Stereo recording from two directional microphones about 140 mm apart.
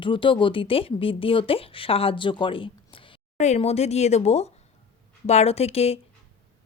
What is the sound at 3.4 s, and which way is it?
Speech, 50° left (ahead or behind).